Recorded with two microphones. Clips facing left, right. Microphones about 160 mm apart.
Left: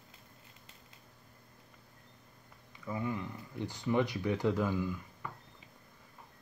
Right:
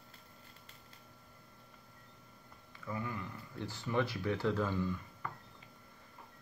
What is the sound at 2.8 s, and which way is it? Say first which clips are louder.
Speech: left 4 dB; 20° left (ahead or behind).